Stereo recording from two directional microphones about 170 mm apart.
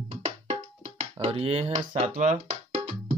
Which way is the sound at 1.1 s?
35° right (ahead or behind).